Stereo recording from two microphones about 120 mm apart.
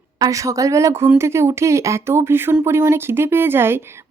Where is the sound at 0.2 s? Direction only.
30° right (ahead or behind).